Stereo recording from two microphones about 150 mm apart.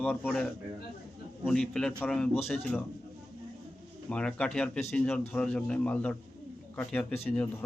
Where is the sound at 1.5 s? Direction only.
5° left (ahead or behind).